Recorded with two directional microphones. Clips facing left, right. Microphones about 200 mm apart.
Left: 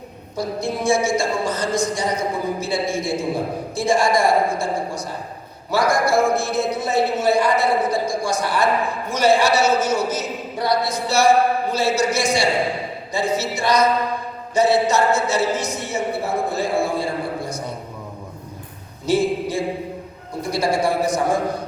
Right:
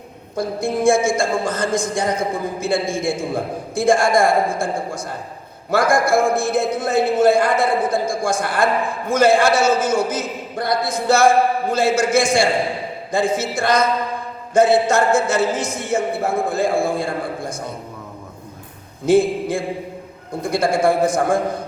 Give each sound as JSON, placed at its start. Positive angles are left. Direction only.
{"t": 0.3, "sound": "a man's voice", "side_deg": -50}
{"t": 19.0, "sound": "a sound", "side_deg": -50}
{"t": 20.4, "sound": "a man's voice", "side_deg": -50}